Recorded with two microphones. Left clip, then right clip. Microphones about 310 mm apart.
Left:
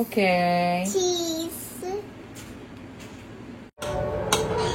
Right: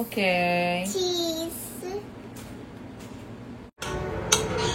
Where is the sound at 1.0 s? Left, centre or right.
Centre.